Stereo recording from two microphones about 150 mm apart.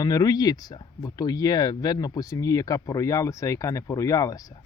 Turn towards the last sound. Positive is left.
turn(degrees=25)  # may be behind; listen again after turning